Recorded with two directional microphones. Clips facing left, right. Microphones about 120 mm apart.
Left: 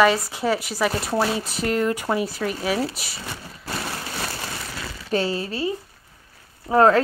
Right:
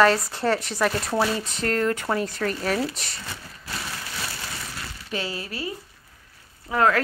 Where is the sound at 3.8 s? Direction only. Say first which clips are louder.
Left 4 dB; 40° left (ahead or behind).